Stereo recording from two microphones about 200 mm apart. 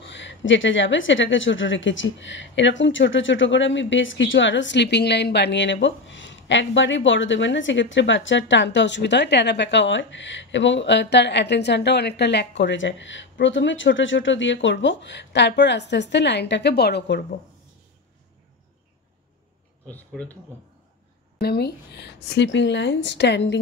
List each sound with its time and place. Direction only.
0.0 s a woman's voice: 65° left (ahead or behind)
19.9 s speech: 10° left (ahead or behind)
21.4 s a woman's voice: 55° left (ahead or behind)